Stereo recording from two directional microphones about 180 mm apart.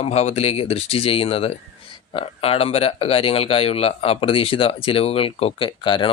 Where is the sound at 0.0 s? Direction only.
40° left (ahead or behind).